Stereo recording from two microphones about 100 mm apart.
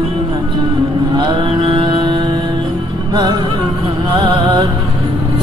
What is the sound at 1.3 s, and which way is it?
Mantra, 60° right (ahead or behind).